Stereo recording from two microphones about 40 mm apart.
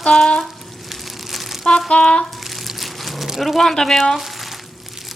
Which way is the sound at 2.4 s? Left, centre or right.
Centre.